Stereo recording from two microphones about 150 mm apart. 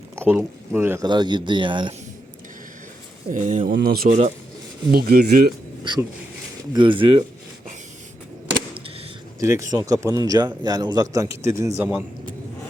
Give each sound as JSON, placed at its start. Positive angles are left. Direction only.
{"t": 0.3, "sound": "speech", "side_deg": -10}
{"t": 1.0, "sound": "a man's voice", "side_deg": -30}
{"t": 3.2, "sound": "speech", "side_deg": -60}
{"t": 3.7, "sound": "speech", "side_deg": -80}
{"t": 5.8, "sound": "a man's voice", "side_deg": -30}
{"t": 9.4, "sound": "a man's voice", "side_deg": -20}
{"t": 11.8, "sound": "a man's voice", "side_deg": -5}